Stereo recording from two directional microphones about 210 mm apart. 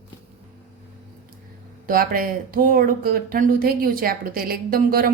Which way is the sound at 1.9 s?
45° right (ahead or behind).